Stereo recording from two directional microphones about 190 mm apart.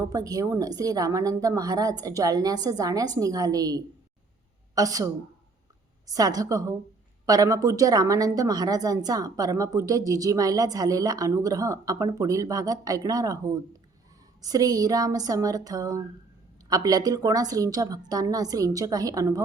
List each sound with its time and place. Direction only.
0.0 s a woman's voice: 20° right (ahead or behind)